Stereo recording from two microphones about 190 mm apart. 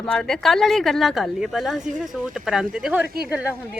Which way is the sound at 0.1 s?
5° left (ahead or behind).